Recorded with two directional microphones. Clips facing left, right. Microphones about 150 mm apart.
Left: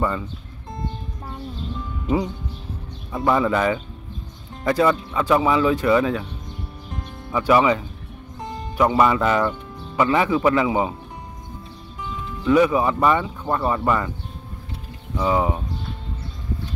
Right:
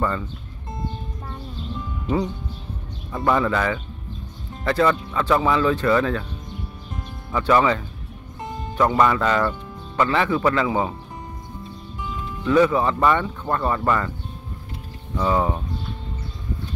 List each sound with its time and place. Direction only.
3.1 s speech: 5° left (ahead or behind)
3.4 s speech: 20° left (ahead or behind)
7.2 s speech: 10° left (ahead or behind)
12.4 s speech: 10° left (ahead or behind)
15.1 s speech: 10° left (ahead or behind)